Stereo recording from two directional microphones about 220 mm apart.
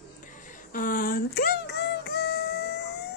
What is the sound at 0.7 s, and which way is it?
Music, 40° left (ahead or behind).